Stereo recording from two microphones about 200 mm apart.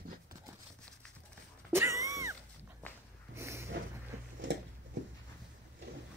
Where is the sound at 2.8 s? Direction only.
10° left (ahead or behind).